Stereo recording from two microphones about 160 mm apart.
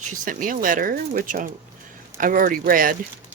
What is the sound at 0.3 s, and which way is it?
Speech, 55° right (ahead or behind).